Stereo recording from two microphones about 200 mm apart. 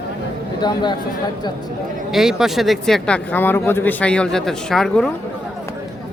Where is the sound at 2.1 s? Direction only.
Centre (ahead or behind).